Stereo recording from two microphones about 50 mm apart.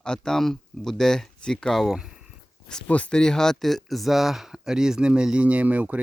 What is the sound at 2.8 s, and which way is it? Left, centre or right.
Speech, left.